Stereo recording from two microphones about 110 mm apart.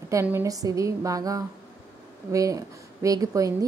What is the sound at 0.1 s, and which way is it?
Speech, 25° right (ahead or behind).